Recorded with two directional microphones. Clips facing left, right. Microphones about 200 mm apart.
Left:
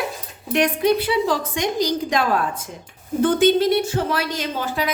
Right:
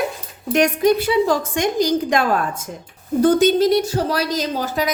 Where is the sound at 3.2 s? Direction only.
40° right (ahead or behind).